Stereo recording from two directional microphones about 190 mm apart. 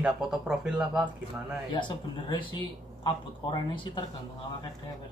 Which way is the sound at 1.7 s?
25° left (ahead or behind).